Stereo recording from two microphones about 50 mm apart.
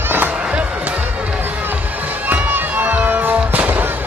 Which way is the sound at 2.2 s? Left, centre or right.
Right.